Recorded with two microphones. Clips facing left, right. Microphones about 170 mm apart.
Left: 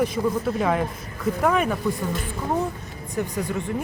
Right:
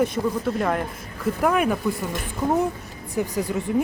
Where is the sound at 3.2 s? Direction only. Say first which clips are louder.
Right 2 dB; 5° right (ahead or behind).